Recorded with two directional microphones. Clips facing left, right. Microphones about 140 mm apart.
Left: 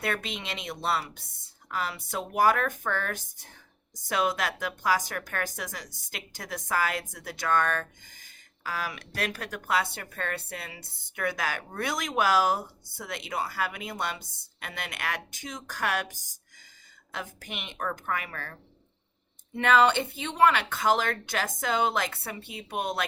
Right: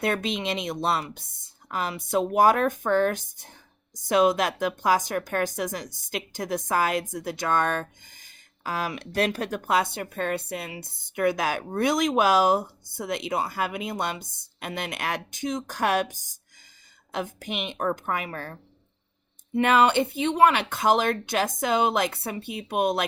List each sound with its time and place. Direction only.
0.0 s speech: 20° right (ahead or behind)
19.5 s speech: 15° right (ahead or behind)